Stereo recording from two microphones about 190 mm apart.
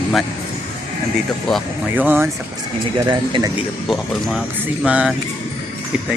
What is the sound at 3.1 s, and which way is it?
Speech, 25° right (ahead or behind).